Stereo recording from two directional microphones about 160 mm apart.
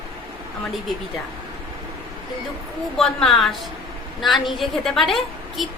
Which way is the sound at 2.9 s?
5° left (ahead or behind).